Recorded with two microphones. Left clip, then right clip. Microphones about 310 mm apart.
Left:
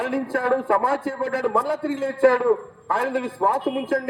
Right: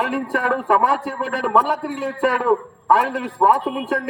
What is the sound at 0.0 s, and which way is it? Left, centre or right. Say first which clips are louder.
A man's voice: right 3 dB; right.